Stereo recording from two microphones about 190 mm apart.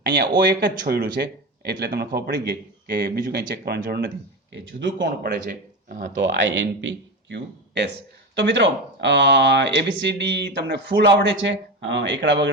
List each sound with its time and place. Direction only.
0.0 s speech: 60° right (ahead or behind)
4.5 s speech: 70° right (ahead or behind)
5.5 s speech: 50° right (ahead or behind)
6.1 s a man's voice: 70° right (ahead or behind)